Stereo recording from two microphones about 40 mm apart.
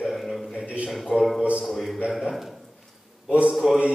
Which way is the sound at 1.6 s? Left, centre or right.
Centre.